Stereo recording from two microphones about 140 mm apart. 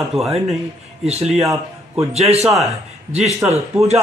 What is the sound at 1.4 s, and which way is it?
Speech, 25° right (ahead or behind).